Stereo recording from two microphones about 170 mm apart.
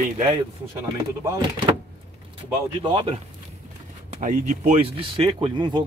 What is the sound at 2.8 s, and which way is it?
Speech, 25° right (ahead or behind).